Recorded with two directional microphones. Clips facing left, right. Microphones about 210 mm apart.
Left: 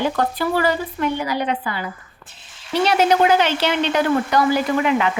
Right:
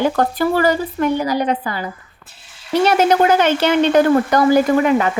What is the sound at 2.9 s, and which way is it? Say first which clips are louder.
Speech: right 1 dB; 50° right (ahead or behind).